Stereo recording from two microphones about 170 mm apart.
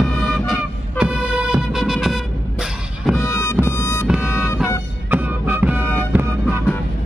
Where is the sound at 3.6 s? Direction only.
15° left (ahead or behind).